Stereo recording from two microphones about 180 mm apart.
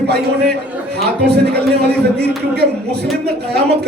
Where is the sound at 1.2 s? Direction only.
65° right (ahead or behind).